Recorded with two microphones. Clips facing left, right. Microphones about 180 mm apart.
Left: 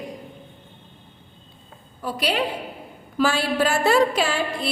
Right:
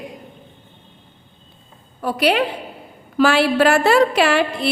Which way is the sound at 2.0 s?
65° right (ahead or behind).